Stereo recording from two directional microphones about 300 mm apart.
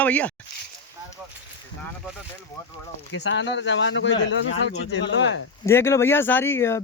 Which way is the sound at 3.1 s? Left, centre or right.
Left.